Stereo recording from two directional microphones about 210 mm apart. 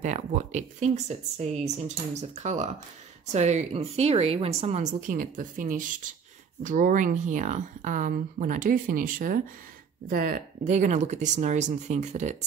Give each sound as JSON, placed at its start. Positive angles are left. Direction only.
{"t": 0.0, "sound": "speech", "side_deg": -35}